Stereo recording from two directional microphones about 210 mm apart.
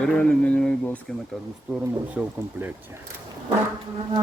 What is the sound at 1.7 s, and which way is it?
Speech, 10° right (ahead or behind).